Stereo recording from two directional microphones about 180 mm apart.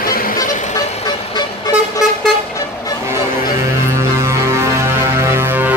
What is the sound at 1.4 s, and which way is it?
Vehicle, 20° left (ahead or behind).